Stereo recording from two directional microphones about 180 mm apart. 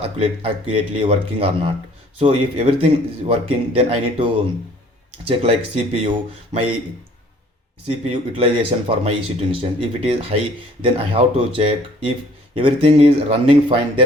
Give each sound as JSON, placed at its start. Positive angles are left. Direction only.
{"t": 0.0, "sound": "speech", "side_deg": -30}
{"t": 7.9, "sound": "speech", "side_deg": -30}